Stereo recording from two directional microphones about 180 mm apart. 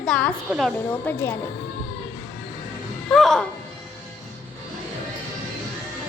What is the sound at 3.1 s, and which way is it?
Music, centre (ahead or behind).